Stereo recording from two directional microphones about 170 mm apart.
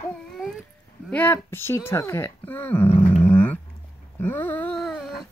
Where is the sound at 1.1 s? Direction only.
10° left (ahead or behind).